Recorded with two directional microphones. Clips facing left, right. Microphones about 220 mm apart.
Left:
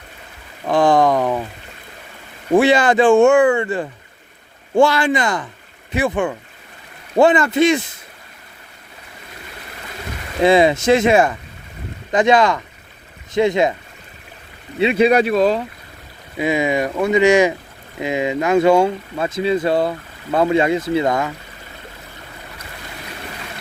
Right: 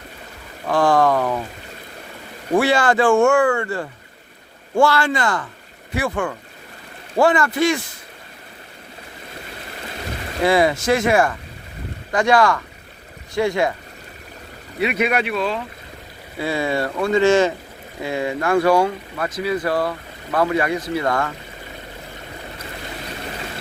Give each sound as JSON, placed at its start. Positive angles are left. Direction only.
{"t": 0.7, "sound": "speech", "side_deg": 20}
{"t": 2.6, "sound": "speech", "side_deg": 20}
{"t": 10.4, "sound": "speech", "side_deg": 20}
{"t": 14.8, "sound": "speech", "side_deg": 30}
{"t": 16.4, "sound": "speech", "side_deg": 15}